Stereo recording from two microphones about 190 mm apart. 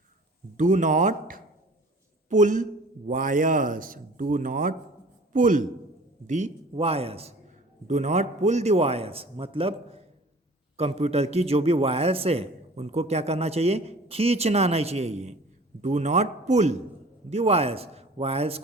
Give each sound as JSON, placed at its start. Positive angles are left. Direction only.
{"t": 0.5, "sound": "a man's voice", "side_deg": -40}